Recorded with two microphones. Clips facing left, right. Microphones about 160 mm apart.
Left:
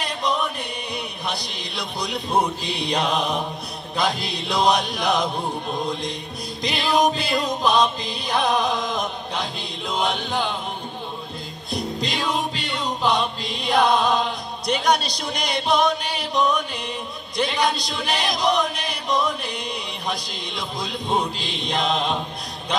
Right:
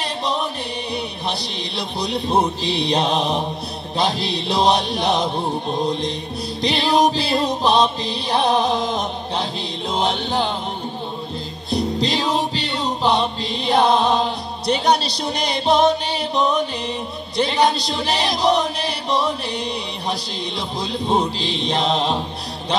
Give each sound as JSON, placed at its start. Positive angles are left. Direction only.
{"t": 0.0, "sound": "music", "side_deg": -30}
{"t": 11.7, "sound": "music", "side_deg": -30}
{"t": 17.4, "sound": "chant", "side_deg": -30}